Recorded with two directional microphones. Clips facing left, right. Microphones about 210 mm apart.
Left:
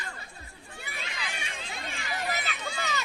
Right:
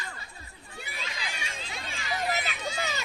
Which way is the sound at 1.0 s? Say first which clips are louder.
Left 1 dB; 55° left (ahead or behind).